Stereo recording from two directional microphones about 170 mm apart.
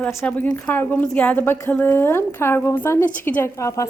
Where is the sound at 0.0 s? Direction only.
10° left (ahead or behind).